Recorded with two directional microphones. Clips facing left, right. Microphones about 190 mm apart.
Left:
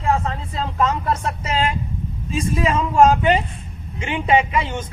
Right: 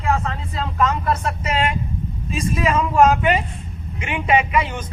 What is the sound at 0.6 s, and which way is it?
Speech, 25° left (ahead or behind).